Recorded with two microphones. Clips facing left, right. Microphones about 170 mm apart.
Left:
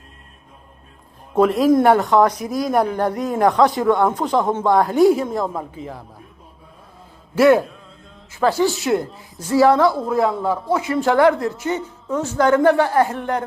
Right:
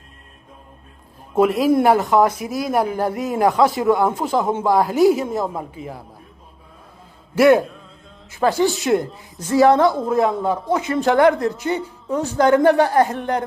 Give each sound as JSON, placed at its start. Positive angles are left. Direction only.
{"t": 1.4, "sound": "speech", "side_deg": -5}
{"t": 7.3, "sound": "a man's voice", "side_deg": -15}
{"t": 12.0, "sound": "a woman's voice", "side_deg": -35}
{"t": 12.3, "sound": "speech", "side_deg": -15}
{"t": 12.8, "sound": "speech", "side_deg": -35}
{"t": 13.1, "sound": "a man's voice", "side_deg": -20}